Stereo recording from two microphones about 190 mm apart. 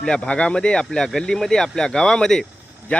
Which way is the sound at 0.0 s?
5° left (ahead or behind).